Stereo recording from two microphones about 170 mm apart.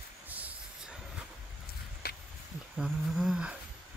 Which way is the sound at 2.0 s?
60° left (ahead or behind).